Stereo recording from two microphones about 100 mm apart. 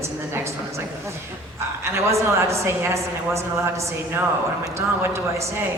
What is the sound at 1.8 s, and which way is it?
A woman's voice, 30° right (ahead or behind).